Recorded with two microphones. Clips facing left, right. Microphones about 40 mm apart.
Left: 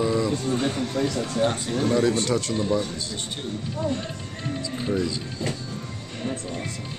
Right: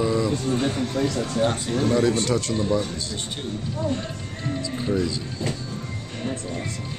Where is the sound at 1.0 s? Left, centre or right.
Right.